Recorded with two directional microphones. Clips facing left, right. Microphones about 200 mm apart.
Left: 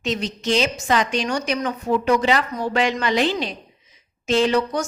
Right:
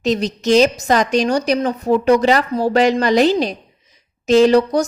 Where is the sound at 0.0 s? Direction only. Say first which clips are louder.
Right 7 dB; 40° right (ahead or behind).